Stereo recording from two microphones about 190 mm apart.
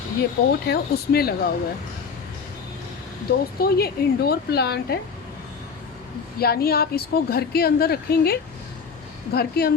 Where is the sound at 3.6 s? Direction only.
55° left (ahead or behind).